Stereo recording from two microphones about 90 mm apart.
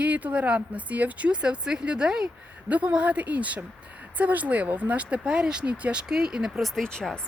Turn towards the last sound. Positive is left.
turn(degrees=10)  # may be behind; listen again after turning